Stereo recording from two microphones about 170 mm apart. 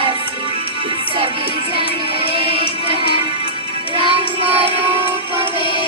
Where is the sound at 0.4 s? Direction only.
30° left (ahead or behind).